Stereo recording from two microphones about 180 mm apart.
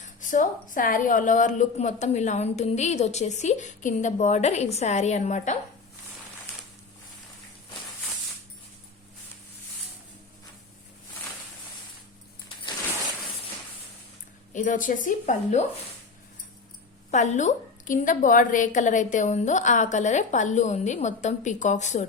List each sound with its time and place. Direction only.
0.0 s a woman's voice: 45° left (ahead or behind)
14.5 s a woman's voice: 45° left (ahead or behind)
17.1 s a woman's voice: 40° left (ahead or behind)